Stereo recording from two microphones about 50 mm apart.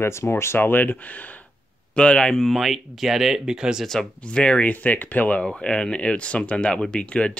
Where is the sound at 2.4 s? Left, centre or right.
Centre.